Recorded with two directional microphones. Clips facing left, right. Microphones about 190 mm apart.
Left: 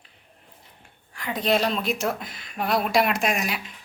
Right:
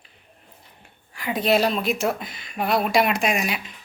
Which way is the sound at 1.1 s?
10° right (ahead or behind).